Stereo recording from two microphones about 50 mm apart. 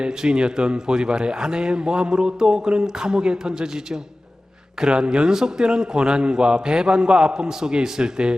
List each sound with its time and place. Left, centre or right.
0.0 s speech: centre
4.8 s speech: centre